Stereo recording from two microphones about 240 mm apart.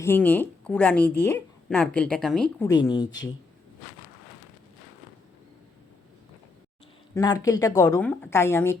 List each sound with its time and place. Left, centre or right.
0.0 s a woman's voice: centre
2.6 s a woman's voice: centre
7.1 s a woman's voice: centre